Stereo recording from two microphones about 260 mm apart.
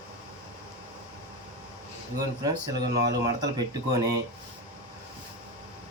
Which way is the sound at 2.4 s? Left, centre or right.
Centre.